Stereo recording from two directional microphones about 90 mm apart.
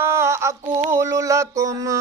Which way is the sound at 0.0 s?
30° right (ahead or behind).